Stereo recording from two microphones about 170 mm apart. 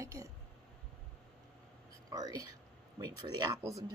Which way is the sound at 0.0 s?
20° right (ahead or behind).